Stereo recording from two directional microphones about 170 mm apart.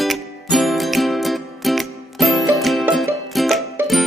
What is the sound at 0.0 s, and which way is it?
Music, centre (ahead or behind).